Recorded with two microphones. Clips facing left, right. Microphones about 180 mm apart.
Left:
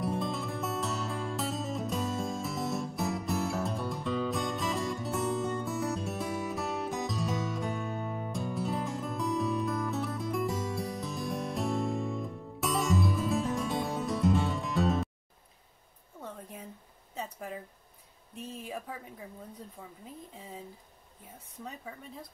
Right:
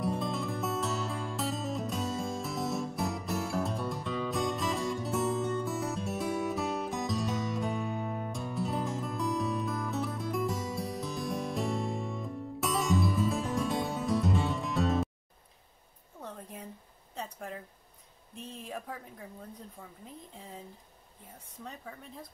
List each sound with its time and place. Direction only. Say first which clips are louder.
0.0 s music: even; centre (ahead or behind)
16.2 s a sound: even; centre (ahead or behind)
17.1 s speech: left 1 dB; centre (ahead or behind)
21.6 s speech: left 1 dB; centre (ahead or behind)